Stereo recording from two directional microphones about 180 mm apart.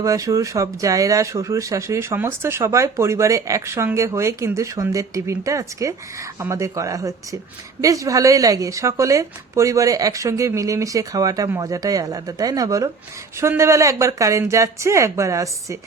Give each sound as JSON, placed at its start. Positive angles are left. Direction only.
{"t": 0.0, "sound": "speech", "side_deg": -20}